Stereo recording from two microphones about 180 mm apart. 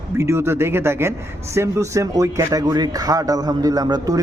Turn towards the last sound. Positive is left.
turn(degrees=-20)  # may be behind; listen again after turning